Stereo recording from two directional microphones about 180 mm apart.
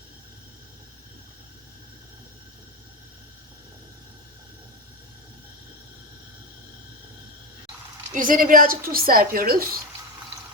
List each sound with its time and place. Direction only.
8.1 s a woman's voice: 50° right (ahead or behind)